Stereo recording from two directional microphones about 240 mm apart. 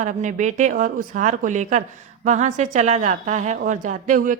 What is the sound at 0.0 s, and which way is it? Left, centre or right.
A woman's voice, right.